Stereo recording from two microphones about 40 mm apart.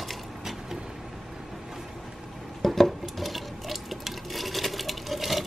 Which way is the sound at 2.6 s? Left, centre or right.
Centre.